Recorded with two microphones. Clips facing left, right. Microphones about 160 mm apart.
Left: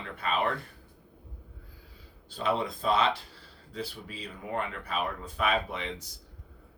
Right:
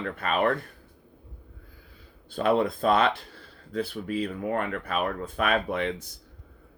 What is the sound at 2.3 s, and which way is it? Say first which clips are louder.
Speech: right 6 dB; 55° right (ahead or behind).